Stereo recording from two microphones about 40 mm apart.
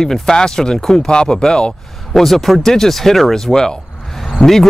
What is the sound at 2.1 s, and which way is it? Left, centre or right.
Speech, centre.